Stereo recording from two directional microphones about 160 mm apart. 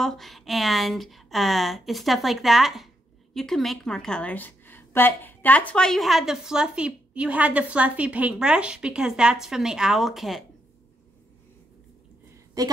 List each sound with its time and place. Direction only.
0.0 s a woman's voice: centre (ahead or behind)
12.6 s a woman's voice: 20° right (ahead or behind)